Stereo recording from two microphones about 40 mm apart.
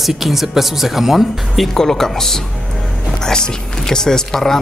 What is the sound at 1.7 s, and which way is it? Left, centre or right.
Speech, centre.